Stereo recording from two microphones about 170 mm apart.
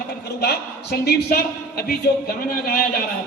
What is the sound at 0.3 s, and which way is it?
A man's voice, 70° left (ahead or behind).